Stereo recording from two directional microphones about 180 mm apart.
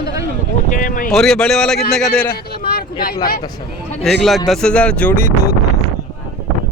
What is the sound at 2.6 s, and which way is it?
Speech, 55° left (ahead or behind).